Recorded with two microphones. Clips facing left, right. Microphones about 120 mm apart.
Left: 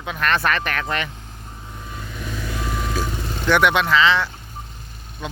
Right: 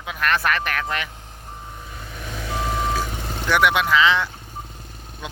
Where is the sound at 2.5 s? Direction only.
25° right (ahead or behind).